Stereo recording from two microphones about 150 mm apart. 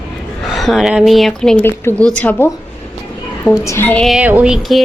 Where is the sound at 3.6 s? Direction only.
15° left (ahead or behind).